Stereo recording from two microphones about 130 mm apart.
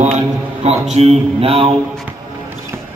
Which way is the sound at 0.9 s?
50° right (ahead or behind).